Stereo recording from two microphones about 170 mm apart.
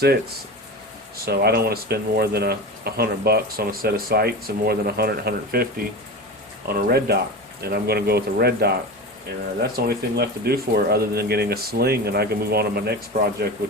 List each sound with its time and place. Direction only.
1.2 s speech: 70° right (ahead or behind)